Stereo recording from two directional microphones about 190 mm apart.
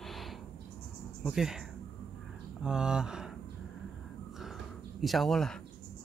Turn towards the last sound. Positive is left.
turn(degrees=5)  # may be behind; listen again after turning